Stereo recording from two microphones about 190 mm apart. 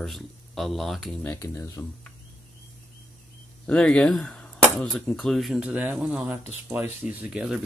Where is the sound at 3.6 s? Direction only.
5° left (ahead or behind).